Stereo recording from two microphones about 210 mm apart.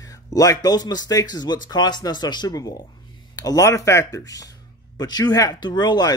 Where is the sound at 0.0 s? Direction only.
15° left (ahead or behind).